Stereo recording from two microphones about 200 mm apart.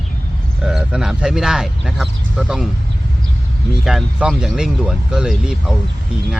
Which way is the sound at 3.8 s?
Centre (ahead or behind).